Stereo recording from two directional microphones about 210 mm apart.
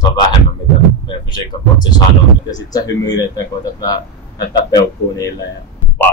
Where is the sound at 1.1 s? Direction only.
20° left (ahead or behind).